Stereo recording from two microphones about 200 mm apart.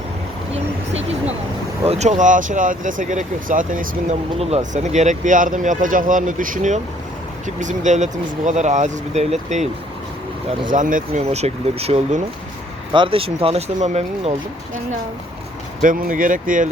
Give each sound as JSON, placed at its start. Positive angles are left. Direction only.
{"t": 1.9, "sound": "speech", "side_deg": -35}
{"t": 10.7, "sound": "speech", "side_deg": -40}
{"t": 15.8, "sound": "speech", "side_deg": -40}